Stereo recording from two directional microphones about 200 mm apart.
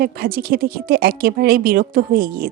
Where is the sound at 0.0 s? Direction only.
45° right (ahead or behind).